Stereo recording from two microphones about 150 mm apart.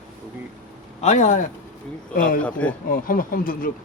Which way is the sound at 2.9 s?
70° left (ahead or behind).